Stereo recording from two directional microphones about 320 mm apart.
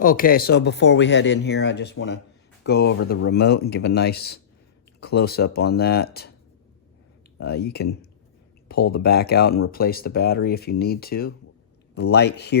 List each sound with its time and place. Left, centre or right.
0.0 s speech: left
7.3 s speech: left